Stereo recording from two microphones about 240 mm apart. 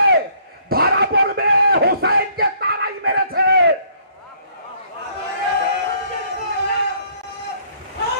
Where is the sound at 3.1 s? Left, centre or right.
Right.